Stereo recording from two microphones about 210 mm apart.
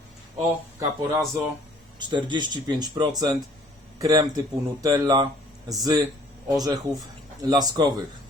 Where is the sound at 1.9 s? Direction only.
20° right (ahead or behind).